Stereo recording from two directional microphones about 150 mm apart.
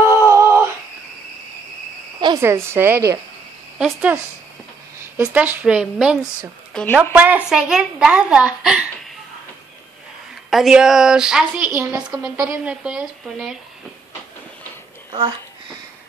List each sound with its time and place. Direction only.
0.0 s a sound: 20° right (ahead or behind)
2.4 s a woman's voice: 15° right (ahead or behind)
3.7 s a woman's voice: 10° right (ahead or behind)
6.7 s a woman's voice: 5° left (ahead or behind)
7.0 s a woman's voice: 10° right (ahead or behind)
10.5 s a woman's voice: 5° right (ahead or behind)
15.0 s a child's voice: 30° right (ahead or behind)